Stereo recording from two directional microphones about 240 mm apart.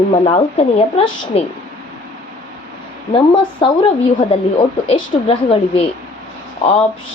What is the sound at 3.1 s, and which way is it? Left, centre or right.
Speech, left.